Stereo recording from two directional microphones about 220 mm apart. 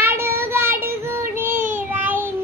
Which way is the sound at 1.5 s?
40° right (ahead or behind).